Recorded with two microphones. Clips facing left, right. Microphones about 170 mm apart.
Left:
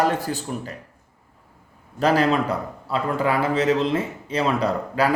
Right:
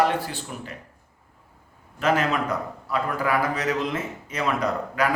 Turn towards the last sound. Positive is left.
turn(degrees=30)  # may be behind; listen again after turning